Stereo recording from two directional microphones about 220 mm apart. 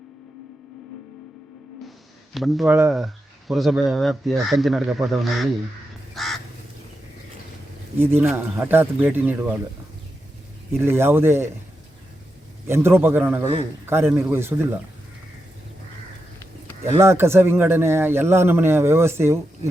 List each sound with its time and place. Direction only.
2.3 s speech: centre (ahead or behind)
6.1 s crow: centre (ahead or behind)
7.9 s speech: 10° right (ahead or behind)
10.8 s speech: 10° right (ahead or behind)
12.6 s speech: 10° right (ahead or behind)
13.4 s a man's voice: 25° right (ahead or behind)
13.8 s speech: 10° right (ahead or behind)
17.0 s speech: 10° right (ahead or behind)